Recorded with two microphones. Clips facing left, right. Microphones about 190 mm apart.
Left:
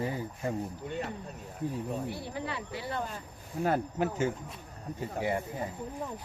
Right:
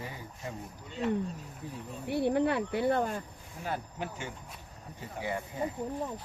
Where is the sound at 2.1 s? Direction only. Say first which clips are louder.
Right 10 dB; 60° right (ahead or behind).